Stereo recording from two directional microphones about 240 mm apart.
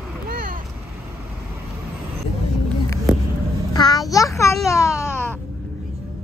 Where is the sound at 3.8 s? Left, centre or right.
Centre.